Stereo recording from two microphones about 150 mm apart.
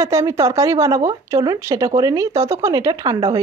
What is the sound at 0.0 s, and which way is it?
A woman's voice, 20° right (ahead or behind).